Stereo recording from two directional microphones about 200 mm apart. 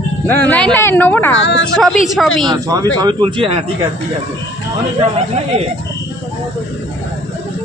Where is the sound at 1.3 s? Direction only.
65° left (ahead or behind).